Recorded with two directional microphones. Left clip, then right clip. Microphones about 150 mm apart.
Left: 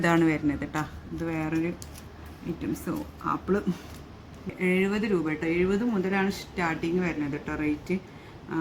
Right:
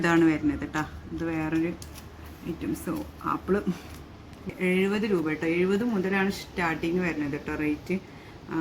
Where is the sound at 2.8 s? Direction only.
25° left (ahead or behind).